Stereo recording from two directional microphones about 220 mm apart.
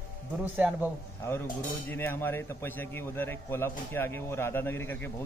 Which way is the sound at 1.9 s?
10° left (ahead or behind).